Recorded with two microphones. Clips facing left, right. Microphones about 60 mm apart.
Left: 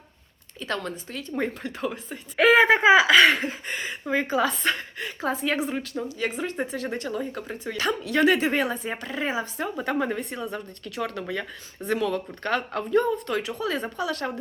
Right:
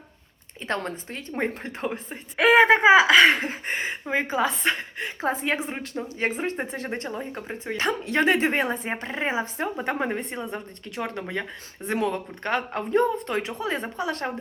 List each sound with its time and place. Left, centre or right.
0.6 s speech: right
4.0 s speech: right